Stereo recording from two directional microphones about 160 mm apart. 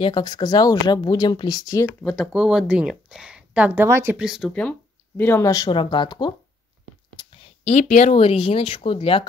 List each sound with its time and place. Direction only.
0.0 s speech: 25° left (ahead or behind)
2.0 s speech: centre (ahead or behind)
4.2 s speech: centre (ahead or behind); by 6.3 s 30° left (ahead or behind)
7.6 s speech: 45° left (ahead or behind)